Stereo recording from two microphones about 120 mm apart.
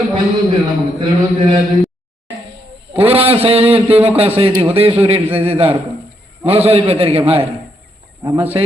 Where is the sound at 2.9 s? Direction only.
55° right (ahead or behind).